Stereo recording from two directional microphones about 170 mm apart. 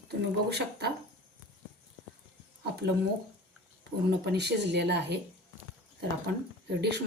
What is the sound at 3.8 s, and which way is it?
A woman's voice, 75° right (ahead or behind).